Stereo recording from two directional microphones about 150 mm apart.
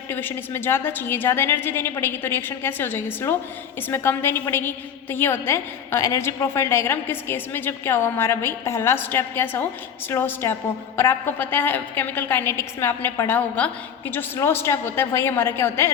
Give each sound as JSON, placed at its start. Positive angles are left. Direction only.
{"t": 0.1, "sound": "a woman's voice", "side_deg": 15}